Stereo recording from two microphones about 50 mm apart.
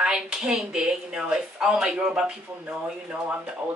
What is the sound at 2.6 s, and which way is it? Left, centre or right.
Speech, right.